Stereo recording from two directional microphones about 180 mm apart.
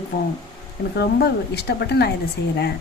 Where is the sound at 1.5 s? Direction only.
65° left (ahead or behind).